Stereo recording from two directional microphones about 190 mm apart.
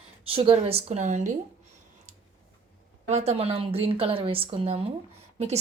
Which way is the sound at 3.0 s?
35° right (ahead or behind).